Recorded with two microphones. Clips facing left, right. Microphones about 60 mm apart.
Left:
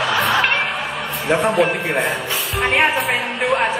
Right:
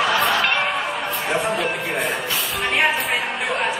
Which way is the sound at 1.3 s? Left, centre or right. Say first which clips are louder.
Left 7 dB; left.